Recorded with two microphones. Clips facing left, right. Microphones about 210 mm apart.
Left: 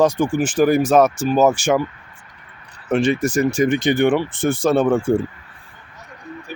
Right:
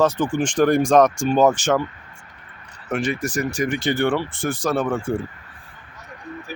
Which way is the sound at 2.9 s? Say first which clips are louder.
Left 6 dB; 25° left (ahead or behind).